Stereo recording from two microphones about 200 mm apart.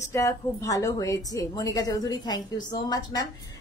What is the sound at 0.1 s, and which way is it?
A woman's voice, 15° left (ahead or behind).